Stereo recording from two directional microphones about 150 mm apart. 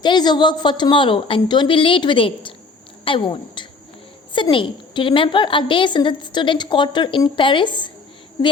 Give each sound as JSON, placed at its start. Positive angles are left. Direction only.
{"t": 0.0, "sound": "a woman's voice", "side_deg": 30}